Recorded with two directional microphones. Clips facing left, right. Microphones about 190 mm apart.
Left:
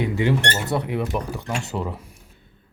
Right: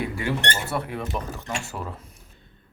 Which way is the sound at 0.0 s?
20° left (ahead or behind).